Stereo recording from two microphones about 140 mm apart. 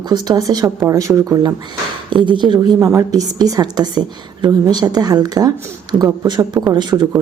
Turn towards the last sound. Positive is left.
turn(degrees=-30)  # may be behind; listen again after turning